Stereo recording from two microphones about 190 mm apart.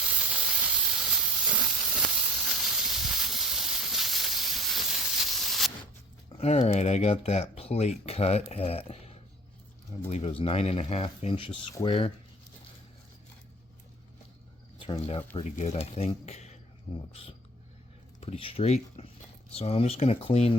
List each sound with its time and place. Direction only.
0.1 s hiss: 5° right (ahead or behind)
6.4 s speech: 35° left (ahead or behind)
14.8 s speech: 30° left (ahead or behind)
18.2 s speech: 30° left (ahead or behind)